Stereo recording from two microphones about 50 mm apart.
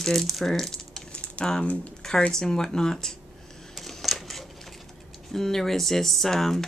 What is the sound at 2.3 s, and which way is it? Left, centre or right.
Speech, centre.